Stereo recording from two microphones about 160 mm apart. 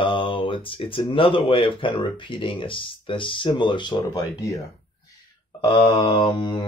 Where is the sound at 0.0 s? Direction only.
30° left (ahead or behind).